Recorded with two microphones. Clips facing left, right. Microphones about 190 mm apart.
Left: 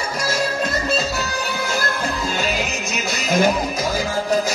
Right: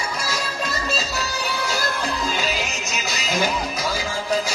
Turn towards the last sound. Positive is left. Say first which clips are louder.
# left 6 dB
turn(degrees=50)  # may be behind; listen again after turning